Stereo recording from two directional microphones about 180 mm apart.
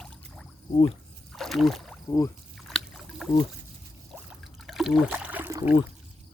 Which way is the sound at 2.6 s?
Centre (ahead or behind).